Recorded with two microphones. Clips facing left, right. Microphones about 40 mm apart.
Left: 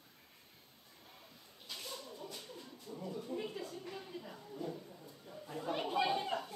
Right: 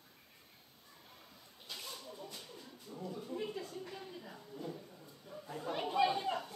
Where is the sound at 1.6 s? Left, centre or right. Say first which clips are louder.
Left 1 dB; centre.